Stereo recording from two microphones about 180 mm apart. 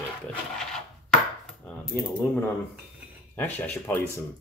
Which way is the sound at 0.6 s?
5° left (ahead or behind).